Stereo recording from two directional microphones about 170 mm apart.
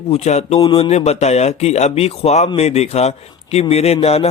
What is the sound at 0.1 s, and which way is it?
A man's voice, 40° left (ahead or behind).